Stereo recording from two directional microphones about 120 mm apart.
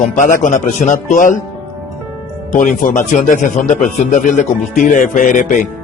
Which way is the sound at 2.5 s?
90° left.